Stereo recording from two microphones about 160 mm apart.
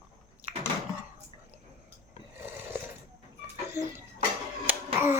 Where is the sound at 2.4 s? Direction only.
15° right (ahead or behind).